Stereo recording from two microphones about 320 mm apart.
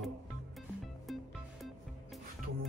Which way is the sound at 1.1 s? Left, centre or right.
Centre.